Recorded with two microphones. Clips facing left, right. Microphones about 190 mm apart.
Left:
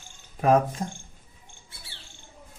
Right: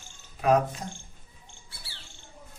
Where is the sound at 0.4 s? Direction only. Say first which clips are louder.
Left 2 dB; 45° left (ahead or behind).